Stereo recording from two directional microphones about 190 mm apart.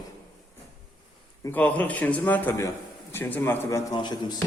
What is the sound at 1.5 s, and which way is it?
A man's voice, 10° left (ahead or behind).